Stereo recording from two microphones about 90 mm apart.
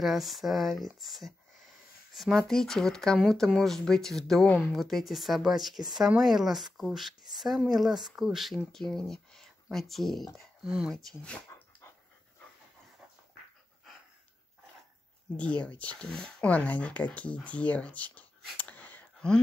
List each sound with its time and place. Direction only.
0.0 s speech: centre (ahead or behind)
10.6 s speech: 10° right (ahead or behind)
10.9 s speech: centre (ahead or behind)
11.8 s dog: 30° left (ahead or behind)
15.3 s speech: 15° left (ahead or behind)